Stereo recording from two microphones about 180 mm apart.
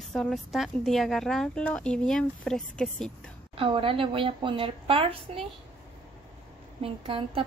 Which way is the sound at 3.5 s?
30° right (ahead or behind).